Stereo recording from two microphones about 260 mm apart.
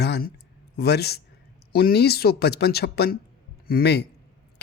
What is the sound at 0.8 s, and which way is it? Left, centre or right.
Speech, left.